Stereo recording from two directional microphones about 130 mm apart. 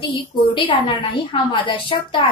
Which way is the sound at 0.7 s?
40° left (ahead or behind).